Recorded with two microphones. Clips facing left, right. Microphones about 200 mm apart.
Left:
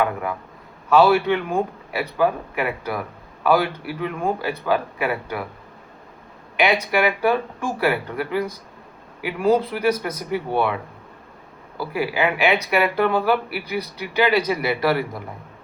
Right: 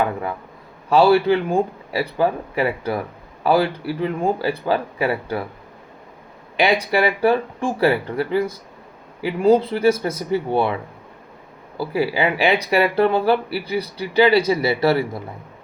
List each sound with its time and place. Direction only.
0.9 s speech: 30° right (ahead or behind)
6.6 s speech: 30° right (ahead or behind)
11.8 s speech: 30° right (ahead or behind)